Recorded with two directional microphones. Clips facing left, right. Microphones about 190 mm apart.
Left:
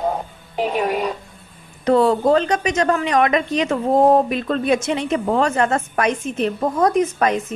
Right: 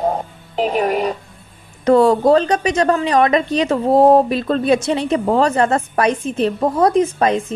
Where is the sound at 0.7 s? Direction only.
50° right (ahead or behind).